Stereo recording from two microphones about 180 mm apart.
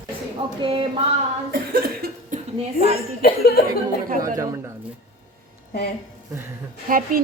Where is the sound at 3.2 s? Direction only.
60° left (ahead or behind).